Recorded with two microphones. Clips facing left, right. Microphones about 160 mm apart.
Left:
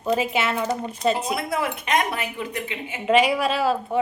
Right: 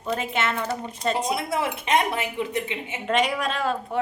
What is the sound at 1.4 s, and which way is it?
Speech, 25° right (ahead or behind).